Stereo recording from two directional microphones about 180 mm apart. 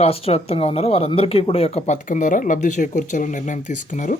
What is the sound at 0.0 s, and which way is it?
Speech, 35° left (ahead or behind).